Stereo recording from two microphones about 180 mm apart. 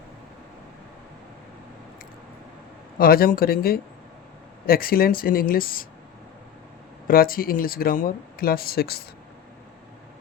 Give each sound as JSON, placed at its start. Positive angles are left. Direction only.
{"t": 3.0, "sound": "speech", "side_deg": 55}
{"t": 7.1, "sound": "speech", "side_deg": 55}